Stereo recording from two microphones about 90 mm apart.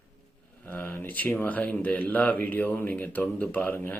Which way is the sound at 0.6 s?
25° left (ahead or behind).